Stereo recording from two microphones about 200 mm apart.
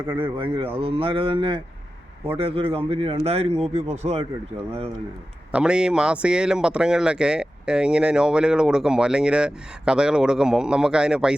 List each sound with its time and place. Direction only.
0.1 s speech: 25° right (ahead or behind)
5.5 s speech: 5° right (ahead or behind)